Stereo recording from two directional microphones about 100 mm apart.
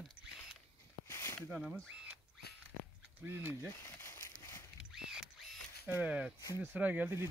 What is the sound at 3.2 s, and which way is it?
Speech, 25° right (ahead or behind).